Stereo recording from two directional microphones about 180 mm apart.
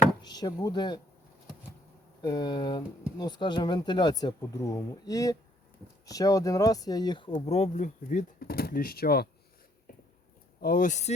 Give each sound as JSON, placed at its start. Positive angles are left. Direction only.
{"t": 0.2, "sound": "speech", "side_deg": 25}
{"t": 2.2, "sound": "speech", "side_deg": 25}
{"t": 10.6, "sound": "speech", "side_deg": 50}